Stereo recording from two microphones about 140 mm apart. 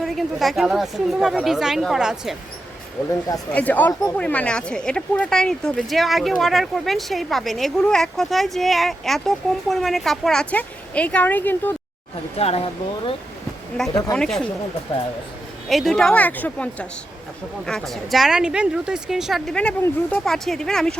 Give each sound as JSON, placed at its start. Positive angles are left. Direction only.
{"t": 0.0, "sound": "speech", "side_deg": 0}
{"t": 3.1, "sound": "speech", "side_deg": 25}
{"t": 3.5, "sound": "a woman's voice", "side_deg": 10}
{"t": 12.4, "sound": "speech", "side_deg": 45}
{"t": 14.2, "sound": "speech", "side_deg": 5}
{"t": 15.7, "sound": "a woman's voice", "side_deg": 0}